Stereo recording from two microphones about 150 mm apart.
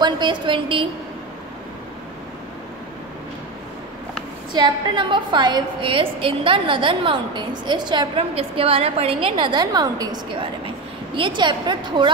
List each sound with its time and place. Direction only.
0.0 s a woman's voice: 30° right (ahead or behind)
4.5 s a woman's voice: 30° right (ahead or behind)